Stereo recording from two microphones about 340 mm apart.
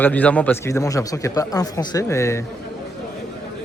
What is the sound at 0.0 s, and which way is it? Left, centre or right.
A man's voice, centre.